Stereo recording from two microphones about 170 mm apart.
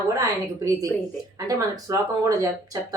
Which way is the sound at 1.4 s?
20° right (ahead or behind).